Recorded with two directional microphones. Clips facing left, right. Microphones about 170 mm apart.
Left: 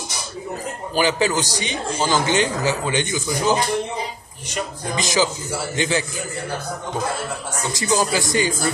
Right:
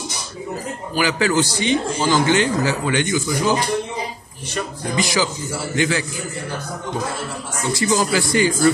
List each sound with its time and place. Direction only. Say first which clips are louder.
0.9 s speech: right 1 dB; 20° left (ahead or behind)
4.9 s speech: even; 20° left (ahead or behind)
7.7 s speech: right 2 dB; 20° left (ahead or behind)